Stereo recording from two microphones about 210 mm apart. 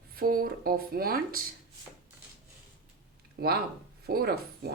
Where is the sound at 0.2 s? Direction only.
45° right (ahead or behind).